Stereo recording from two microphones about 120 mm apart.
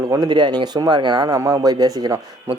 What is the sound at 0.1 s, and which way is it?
Speech, 35° right (ahead or behind).